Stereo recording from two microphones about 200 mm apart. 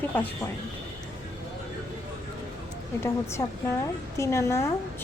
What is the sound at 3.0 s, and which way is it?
Speech, 15° left (ahead or behind).